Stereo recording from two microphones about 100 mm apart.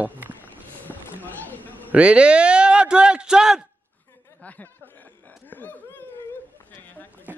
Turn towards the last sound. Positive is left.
turn(degrees=15)  # may be behind; listen again after turning